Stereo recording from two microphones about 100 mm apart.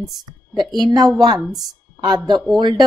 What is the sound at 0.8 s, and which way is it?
Speech, 45° right (ahead or behind).